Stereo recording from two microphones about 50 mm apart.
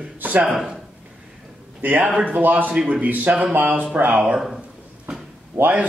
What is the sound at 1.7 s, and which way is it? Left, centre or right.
A man's voice, right.